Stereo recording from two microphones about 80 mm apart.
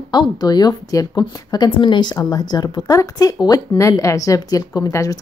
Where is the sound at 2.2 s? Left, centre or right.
Left.